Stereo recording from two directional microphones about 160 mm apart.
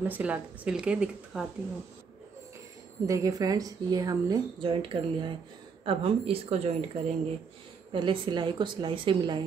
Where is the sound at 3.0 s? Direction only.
20° right (ahead or behind); by 6.7 s 40° right (ahead or behind).